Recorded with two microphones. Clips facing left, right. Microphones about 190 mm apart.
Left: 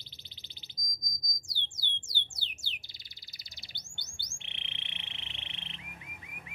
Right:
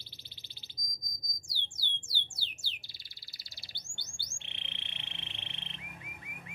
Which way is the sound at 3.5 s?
20° left (ahead or behind).